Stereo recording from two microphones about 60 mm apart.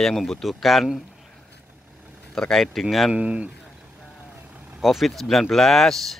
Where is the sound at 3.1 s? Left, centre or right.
Right.